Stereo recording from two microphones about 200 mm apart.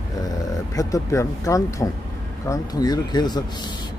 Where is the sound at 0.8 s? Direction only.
15° left (ahead or behind).